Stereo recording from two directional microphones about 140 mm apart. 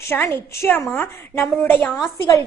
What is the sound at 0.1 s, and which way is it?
A woman's voice, 15° left (ahead or behind).